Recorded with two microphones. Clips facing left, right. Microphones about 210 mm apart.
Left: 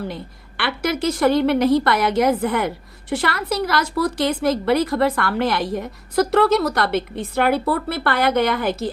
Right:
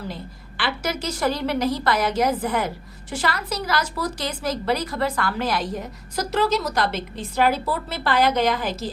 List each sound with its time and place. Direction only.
0.1 s a woman's voice: 60° left (ahead or behind)